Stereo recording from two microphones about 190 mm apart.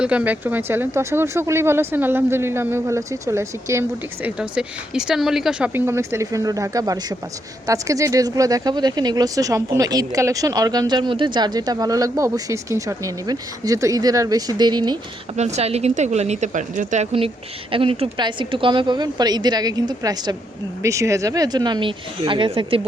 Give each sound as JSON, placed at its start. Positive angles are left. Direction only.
{"t": 0.0, "sound": "speech", "side_deg": -5}
{"t": 15.4, "sound": "speech", "side_deg": -35}